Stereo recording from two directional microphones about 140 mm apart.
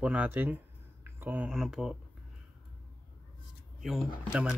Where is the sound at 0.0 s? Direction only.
10° right (ahead or behind).